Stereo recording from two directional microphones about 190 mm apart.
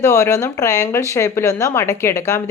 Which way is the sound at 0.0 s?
15° left (ahead or behind).